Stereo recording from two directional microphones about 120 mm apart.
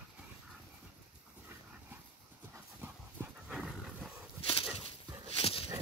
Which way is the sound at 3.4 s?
5° right (ahead or behind).